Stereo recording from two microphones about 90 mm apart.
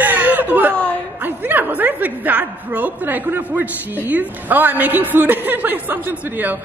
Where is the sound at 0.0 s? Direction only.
20° right (ahead or behind).